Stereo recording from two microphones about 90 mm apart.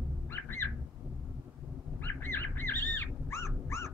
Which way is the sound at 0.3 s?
25° left (ahead or behind).